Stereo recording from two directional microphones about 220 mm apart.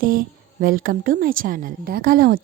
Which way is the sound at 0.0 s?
40° right (ahead or behind).